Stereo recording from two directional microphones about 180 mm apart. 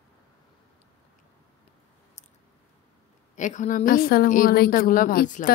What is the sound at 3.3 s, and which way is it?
A woman's voice, 45° left (ahead or behind).